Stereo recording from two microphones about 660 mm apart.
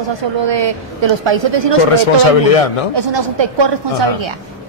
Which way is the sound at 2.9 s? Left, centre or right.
Right.